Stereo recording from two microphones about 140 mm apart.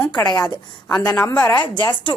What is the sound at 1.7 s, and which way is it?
Speech, 35° left (ahead or behind).